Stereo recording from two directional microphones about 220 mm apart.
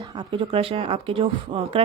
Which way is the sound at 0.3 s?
25° right (ahead or behind).